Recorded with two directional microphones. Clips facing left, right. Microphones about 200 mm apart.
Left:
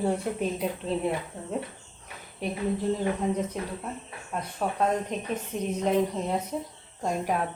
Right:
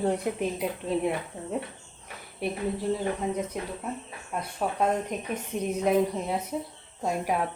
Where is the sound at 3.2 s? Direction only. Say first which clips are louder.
Left 2 dB; 5° right (ahead or behind).